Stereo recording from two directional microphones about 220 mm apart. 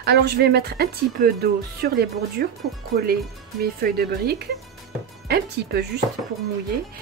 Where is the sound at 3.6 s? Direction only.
45° right (ahead or behind).